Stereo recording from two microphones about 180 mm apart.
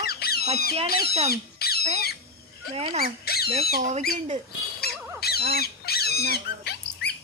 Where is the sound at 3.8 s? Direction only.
40° right (ahead or behind).